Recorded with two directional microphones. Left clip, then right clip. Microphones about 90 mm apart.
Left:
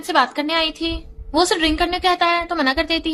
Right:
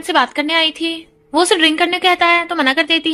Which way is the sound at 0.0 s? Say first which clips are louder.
Right 3 dB; 45° right (ahead or behind).